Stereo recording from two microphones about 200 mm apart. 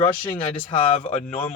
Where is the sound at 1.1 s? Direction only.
35° left (ahead or behind).